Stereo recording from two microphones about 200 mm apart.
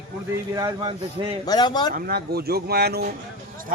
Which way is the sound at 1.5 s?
20° left (ahead or behind).